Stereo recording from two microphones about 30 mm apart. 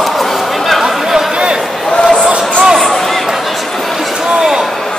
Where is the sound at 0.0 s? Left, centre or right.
Centre.